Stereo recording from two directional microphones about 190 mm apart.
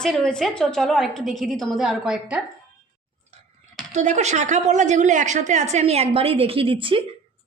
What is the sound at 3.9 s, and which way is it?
A woman's voice, 35° right (ahead or behind).